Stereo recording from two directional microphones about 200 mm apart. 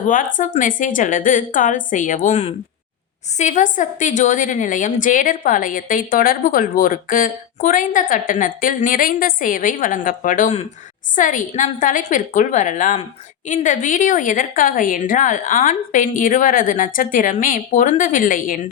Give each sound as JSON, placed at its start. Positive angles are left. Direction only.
{"t": 0.3, "sound": "a woman's voice", "side_deg": 40}